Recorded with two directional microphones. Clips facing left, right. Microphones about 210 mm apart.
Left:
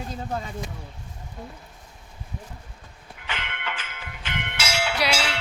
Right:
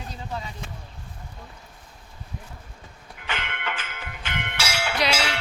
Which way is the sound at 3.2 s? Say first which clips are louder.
Right 2 dB; 50° right (ahead or behind).